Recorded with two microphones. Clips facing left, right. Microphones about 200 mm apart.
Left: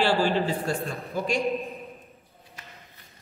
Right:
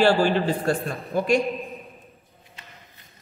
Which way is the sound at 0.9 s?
55° right (ahead or behind).